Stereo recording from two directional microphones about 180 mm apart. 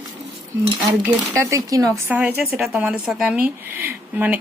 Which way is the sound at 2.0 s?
10° right (ahead or behind).